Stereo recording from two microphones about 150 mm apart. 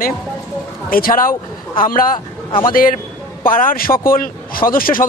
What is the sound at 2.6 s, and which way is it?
A man's voice, 70° left (ahead or behind).